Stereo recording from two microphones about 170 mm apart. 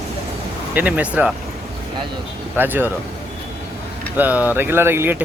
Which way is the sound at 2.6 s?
10° right (ahead or behind).